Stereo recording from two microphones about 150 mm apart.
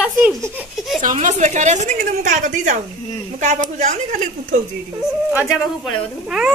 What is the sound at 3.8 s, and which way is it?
Speech, 55° right (ahead or behind).